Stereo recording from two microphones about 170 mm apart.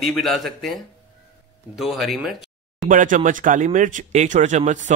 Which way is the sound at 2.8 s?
50° right (ahead or behind).